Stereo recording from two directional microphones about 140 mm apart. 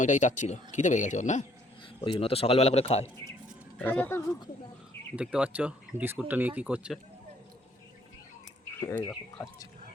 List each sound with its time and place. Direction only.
0.0 s speech: 60° left (ahead or behind)
2.0 s a man's voice: 40° left (ahead or behind)
3.8 s speech: 10° left (ahead or behind)
5.1 s speech: 10° right (ahead or behind)
8.9 s speech: 20° left (ahead or behind)